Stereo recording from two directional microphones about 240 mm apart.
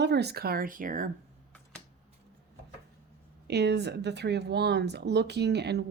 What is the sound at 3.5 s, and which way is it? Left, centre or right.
Speech, right.